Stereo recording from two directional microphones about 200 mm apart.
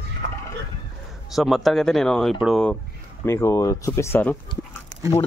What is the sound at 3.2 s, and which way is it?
Speech, 15° left (ahead or behind).